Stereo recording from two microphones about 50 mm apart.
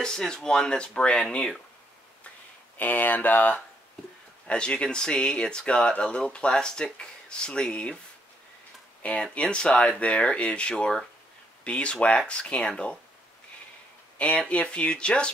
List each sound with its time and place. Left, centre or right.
0.0 s speech: centre
2.8 s speech: left
4.5 s speech: left
9.3 s speech: left
14.1 s speech: left